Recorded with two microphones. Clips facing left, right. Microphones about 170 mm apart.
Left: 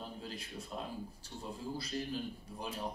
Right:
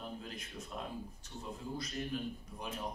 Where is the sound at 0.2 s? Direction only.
30° left (ahead or behind).